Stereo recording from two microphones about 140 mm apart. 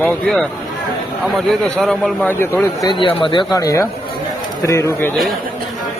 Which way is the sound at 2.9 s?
40° left (ahead or behind).